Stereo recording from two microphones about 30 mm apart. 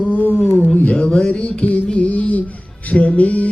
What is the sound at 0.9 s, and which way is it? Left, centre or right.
Music, left.